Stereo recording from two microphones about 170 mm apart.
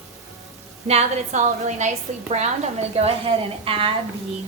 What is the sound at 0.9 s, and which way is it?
A woman's voice, 40° right (ahead or behind).